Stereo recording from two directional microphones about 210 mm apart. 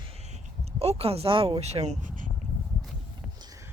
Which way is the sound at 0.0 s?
30° right (ahead or behind).